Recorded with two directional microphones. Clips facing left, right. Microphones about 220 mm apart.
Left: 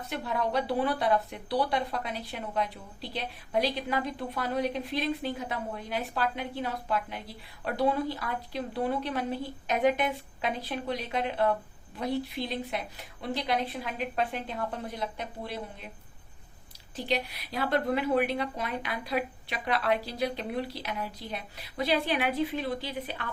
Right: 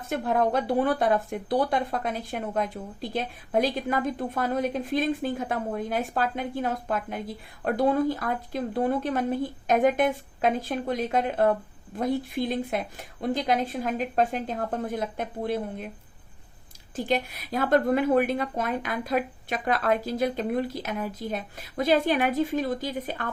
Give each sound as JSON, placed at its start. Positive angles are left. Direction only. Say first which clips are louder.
{"t": 0.0, "sound": "speech", "louder": "right 7 dB", "side_deg": -50}
{"t": 16.9, "sound": "speech", "louder": "right 4 dB", "side_deg": -50}